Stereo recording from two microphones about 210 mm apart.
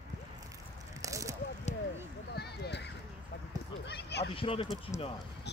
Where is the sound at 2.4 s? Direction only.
50° left (ahead or behind).